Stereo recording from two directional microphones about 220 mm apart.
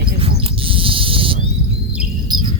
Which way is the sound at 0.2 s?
25° right (ahead or behind).